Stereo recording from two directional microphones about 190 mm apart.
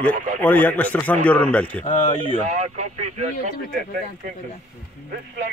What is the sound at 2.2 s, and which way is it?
Speech, 35° right (ahead or behind).